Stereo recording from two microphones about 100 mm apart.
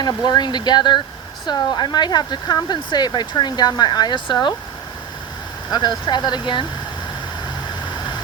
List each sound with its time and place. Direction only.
0.0 s speech: 45° left (ahead or behind)
5.7 s speech: 45° left (ahead or behind)